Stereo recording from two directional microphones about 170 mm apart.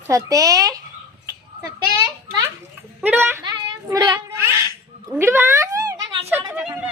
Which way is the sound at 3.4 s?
25° right (ahead or behind).